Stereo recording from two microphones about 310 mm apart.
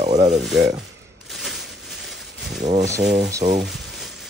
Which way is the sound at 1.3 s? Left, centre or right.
Centre.